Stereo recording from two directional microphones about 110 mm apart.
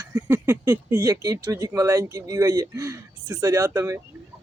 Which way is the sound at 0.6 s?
30° right (ahead or behind).